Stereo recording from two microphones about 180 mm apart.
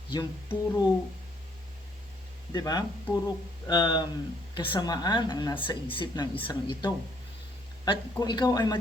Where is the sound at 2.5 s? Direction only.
20° left (ahead or behind).